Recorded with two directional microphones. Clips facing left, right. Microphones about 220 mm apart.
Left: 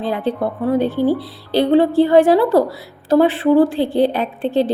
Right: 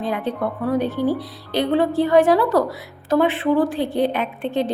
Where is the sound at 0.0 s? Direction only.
30° left (ahead or behind).